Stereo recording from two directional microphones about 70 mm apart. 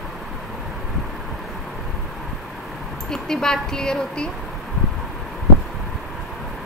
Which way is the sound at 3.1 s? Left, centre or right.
Centre.